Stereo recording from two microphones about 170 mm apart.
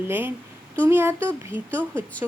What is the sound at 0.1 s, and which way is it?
A woman's voice, 10° right (ahead or behind).